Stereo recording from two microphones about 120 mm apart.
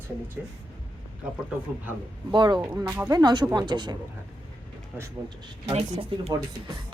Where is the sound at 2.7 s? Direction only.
25° right (ahead or behind).